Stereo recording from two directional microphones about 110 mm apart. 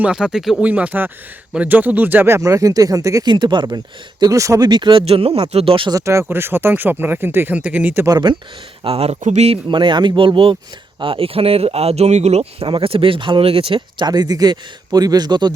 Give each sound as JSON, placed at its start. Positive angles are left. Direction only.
{"t": 0.0, "sound": "speech", "side_deg": -5}
{"t": 3.2, "sound": "speech", "side_deg": -45}
{"t": 4.2, "sound": "speech", "side_deg": -30}
{"t": 4.7, "sound": "speech", "side_deg": -50}
{"t": 5.9, "sound": "speech", "side_deg": -25}
{"t": 8.0, "sound": "speech", "side_deg": -40}
{"t": 8.8, "sound": "speech", "side_deg": -65}
{"t": 9.6, "sound": "speech", "side_deg": -45}
{"t": 14.0, "sound": "speech", "side_deg": -40}